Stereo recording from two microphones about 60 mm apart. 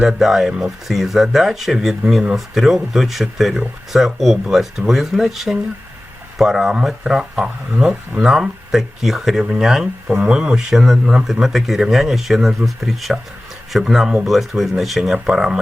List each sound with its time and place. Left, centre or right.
0.0 s speech: centre
8.2 s speech: centre